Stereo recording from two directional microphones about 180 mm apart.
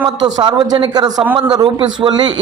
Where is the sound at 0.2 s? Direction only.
25° right (ahead or behind).